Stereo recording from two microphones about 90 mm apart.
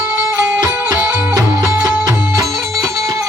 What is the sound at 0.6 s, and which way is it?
Music, 20° right (ahead or behind).